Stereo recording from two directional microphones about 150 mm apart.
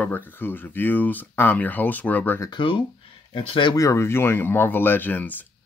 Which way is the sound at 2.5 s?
35° left (ahead or behind).